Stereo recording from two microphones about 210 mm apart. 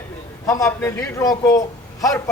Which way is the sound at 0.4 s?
15° left (ahead or behind).